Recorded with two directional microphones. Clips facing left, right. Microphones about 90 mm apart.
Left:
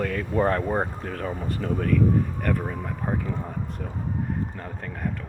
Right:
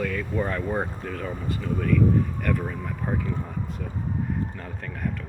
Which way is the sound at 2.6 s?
15° left (ahead or behind).